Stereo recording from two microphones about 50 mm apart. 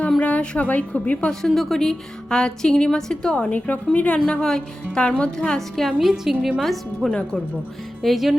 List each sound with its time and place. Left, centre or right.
0.2 s a woman's voice: left
1.3 s a woman's voice: centre
1.8 s a woman's voice: centre
3.3 s a woman's voice: left; by 8.4 s centre